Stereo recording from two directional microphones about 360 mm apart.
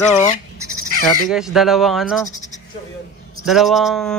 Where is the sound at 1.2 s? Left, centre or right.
Centre.